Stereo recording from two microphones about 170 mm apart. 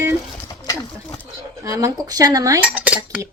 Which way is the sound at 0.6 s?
20° left (ahead or behind).